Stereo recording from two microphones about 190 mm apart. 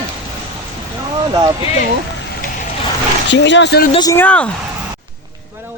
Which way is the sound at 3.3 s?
70° left (ahead or behind).